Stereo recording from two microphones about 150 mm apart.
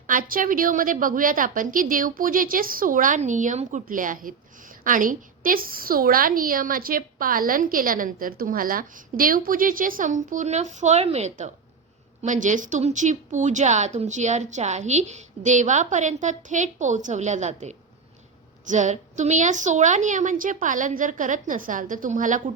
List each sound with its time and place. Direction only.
0.1 s a woman's voice: 65° right (ahead or behind)